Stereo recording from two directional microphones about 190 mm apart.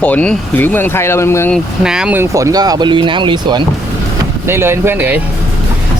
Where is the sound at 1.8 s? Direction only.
5° right (ahead or behind); by 3.6 s 25° right (ahead or behind).